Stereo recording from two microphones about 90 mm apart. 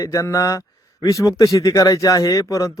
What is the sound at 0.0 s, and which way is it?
A man's voice, 35° left (ahead or behind).